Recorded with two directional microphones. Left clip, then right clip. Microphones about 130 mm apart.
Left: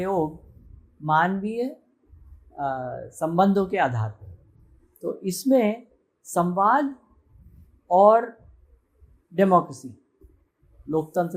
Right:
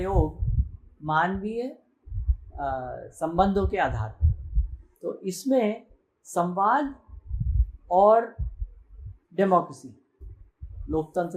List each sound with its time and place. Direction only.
1.0 s speech: 50° left (ahead or behind)
7.9 s speech: 50° left (ahead or behind)
9.3 s speech: 50° left (ahead or behind)
10.8 s speech: 50° left (ahead or behind)